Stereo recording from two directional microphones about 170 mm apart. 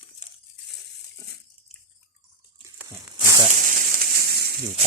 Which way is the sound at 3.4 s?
50° right (ahead or behind).